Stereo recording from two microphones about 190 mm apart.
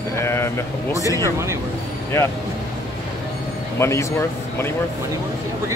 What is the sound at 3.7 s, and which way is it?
Speech, 15° left (ahead or behind).